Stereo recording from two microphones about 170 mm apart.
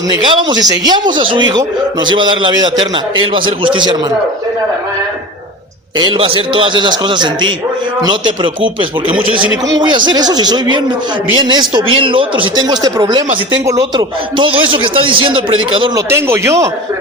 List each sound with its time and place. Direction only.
0.1 s speech: 25° right (ahead or behind)
6.0 s speech: 30° right (ahead or behind)
16.0 s speech: 15° right (ahead or behind)